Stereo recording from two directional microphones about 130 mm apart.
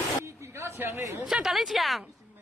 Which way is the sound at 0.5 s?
20° right (ahead or behind).